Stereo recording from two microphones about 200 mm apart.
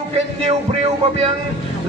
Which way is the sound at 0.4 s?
30° right (ahead or behind).